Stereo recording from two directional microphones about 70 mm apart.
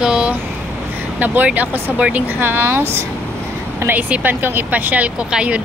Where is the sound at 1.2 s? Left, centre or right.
Right.